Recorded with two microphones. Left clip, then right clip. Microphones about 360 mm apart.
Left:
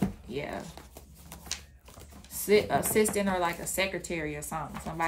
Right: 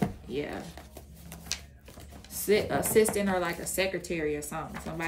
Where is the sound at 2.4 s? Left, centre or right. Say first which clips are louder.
Left 2 dB; centre.